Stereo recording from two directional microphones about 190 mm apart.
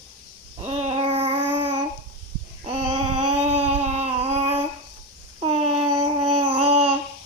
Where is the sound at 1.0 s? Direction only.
25° right (ahead or behind).